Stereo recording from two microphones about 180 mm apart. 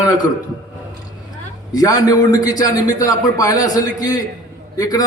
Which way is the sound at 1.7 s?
20° left (ahead or behind).